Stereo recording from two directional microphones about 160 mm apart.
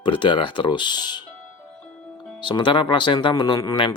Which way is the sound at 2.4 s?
30° left (ahead or behind).